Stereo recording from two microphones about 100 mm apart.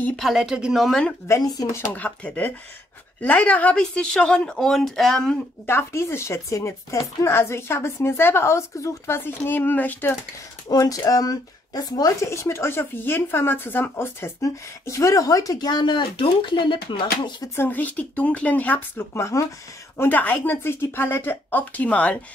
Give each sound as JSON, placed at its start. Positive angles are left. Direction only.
{"t": 0.1, "sound": "speech", "side_deg": 0}
{"t": 1.2, "sound": "speech", "side_deg": 35}
{"t": 1.9, "sound": "speech", "side_deg": 15}
{"t": 5.7, "sound": "speech", "side_deg": 25}
{"t": 10.7, "sound": "speech", "side_deg": 40}
{"t": 17.6, "sound": "speech", "side_deg": 20}
{"t": 20.0, "sound": "speech", "side_deg": 15}